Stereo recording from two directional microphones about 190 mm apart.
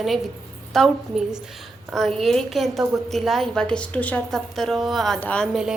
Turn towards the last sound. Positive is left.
turn(degrees=0)  # may be behind; listen again after turning